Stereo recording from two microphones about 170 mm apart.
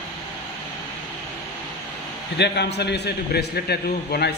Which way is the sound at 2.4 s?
80° left.